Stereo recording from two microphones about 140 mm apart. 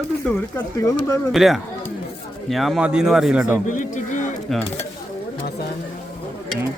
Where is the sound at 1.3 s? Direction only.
Centre (ahead or behind).